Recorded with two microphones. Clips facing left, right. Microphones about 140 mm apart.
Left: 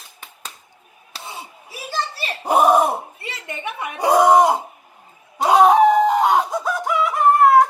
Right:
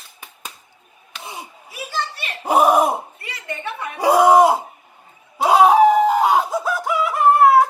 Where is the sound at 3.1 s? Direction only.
25° left (ahead or behind).